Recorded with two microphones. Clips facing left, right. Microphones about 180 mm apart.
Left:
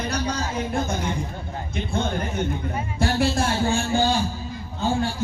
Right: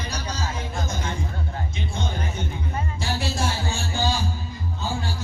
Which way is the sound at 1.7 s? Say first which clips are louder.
Left 8 dB; 55° left (ahead or behind).